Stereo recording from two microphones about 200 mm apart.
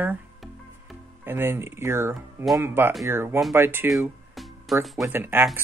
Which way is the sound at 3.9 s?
Centre (ahead or behind).